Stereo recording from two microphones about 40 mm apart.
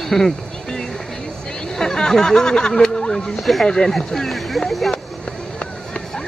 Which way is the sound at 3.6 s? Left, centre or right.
Centre.